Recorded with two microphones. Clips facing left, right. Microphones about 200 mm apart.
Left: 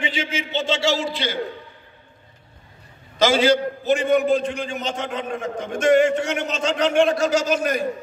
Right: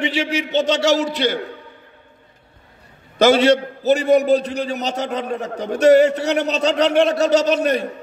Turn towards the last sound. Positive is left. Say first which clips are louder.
# right 4 dB
turn(degrees=-35)  # may be behind; listen again after turning